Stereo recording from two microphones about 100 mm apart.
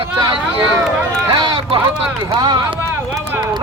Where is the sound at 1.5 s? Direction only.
65° right (ahead or behind).